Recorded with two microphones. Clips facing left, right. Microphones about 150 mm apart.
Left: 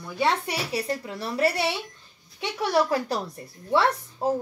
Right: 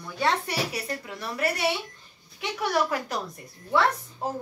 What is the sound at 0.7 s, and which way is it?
Speech, 30° left (ahead or behind).